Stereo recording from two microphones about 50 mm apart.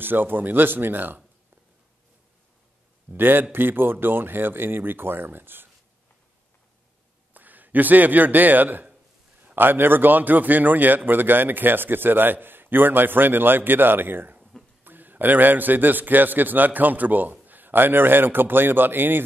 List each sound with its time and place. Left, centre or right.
0.0 s a man's voice: right
3.1 s a man's voice: right
7.3 s a man's voice: right